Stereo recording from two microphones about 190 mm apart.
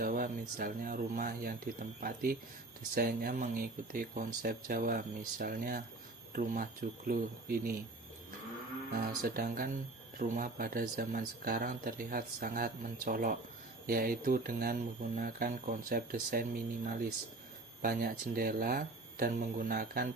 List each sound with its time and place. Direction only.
0.0 s speech: 50° right (ahead or behind)
9.2 s speech: 50° right (ahead or behind)